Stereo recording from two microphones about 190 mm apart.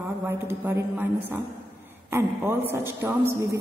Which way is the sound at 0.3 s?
15° right (ahead or behind).